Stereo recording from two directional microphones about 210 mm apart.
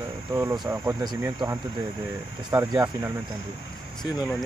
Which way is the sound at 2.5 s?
15° right (ahead or behind).